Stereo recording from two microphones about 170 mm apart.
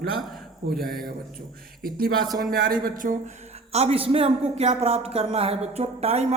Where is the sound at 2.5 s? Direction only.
60° right (ahead or behind).